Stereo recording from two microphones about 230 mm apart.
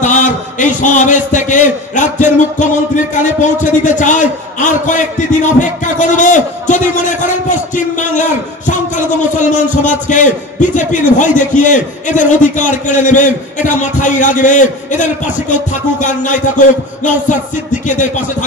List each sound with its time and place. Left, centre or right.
0.0 s a man's voice: left
3.3 s music: left
4.0 s a man's voice: left
15.5 s music: left